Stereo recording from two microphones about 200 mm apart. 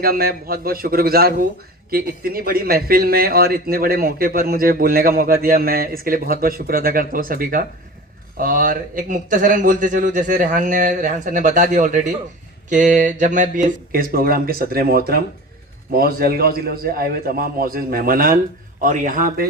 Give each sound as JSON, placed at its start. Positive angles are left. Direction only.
{"t": 0.0, "sound": "a man's voice", "side_deg": -50}